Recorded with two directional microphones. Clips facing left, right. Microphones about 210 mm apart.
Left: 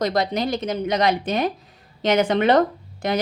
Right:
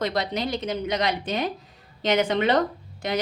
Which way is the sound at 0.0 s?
45° left (ahead or behind).